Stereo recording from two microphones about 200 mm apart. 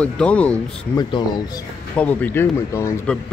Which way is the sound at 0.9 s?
20° left (ahead or behind).